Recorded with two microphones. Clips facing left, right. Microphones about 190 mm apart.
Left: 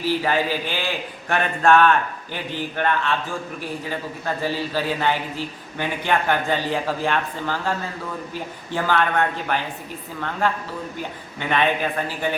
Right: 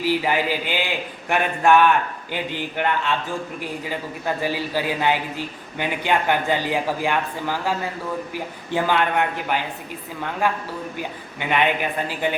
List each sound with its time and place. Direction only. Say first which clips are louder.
0.0 s a man's voice: even; 15° right (ahead or behind)